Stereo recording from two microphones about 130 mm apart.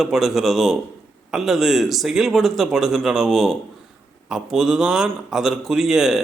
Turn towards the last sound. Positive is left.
turn(degrees=-5)  # may be behind; listen again after turning